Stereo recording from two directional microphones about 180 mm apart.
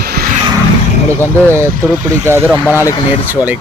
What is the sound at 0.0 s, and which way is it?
Vehicle, 60° right (ahead or behind).